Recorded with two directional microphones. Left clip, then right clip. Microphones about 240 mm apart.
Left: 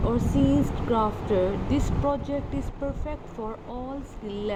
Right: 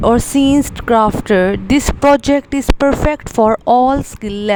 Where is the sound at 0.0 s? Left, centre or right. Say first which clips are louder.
Right 13 dB; right.